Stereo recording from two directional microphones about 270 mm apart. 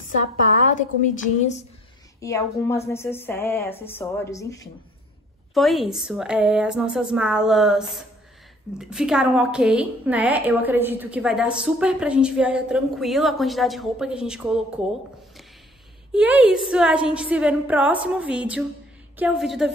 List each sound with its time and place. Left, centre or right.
0.7 s a woman's voice: left
2.1 s a woman's voice: centre
5.5 s a woman's voice: centre
16.1 s a woman's voice: centre